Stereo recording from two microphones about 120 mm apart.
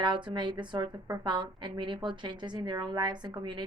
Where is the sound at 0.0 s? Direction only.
40° right (ahead or behind).